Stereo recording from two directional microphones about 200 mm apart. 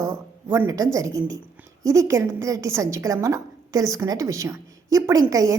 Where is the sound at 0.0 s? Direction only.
15° right (ahead or behind).